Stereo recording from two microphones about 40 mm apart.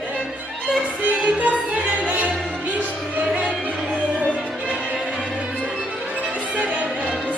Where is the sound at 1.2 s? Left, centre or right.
Right.